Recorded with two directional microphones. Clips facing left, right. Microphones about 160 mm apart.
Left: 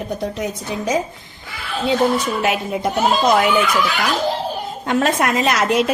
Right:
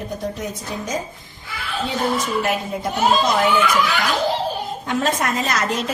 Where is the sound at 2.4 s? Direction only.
80° left.